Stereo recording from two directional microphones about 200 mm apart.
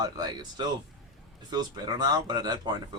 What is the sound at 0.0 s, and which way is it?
Speech, 20° right (ahead or behind).